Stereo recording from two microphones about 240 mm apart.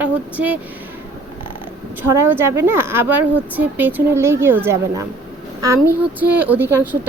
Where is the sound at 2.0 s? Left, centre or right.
Centre.